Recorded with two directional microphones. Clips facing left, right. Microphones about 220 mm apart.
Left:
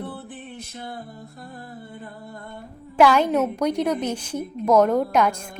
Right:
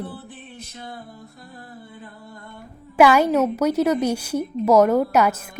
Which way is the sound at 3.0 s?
10° right (ahead or behind).